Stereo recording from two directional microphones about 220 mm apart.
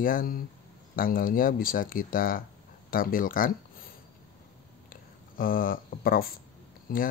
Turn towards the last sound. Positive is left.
turn(degrees=40)  # may be behind; listen again after turning